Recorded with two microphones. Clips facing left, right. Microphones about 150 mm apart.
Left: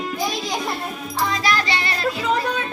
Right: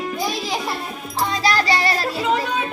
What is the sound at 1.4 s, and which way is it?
Music, 35° right (ahead or behind).